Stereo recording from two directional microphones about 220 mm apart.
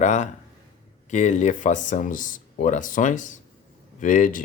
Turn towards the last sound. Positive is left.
turn(degrees=35)  # may be behind; listen again after turning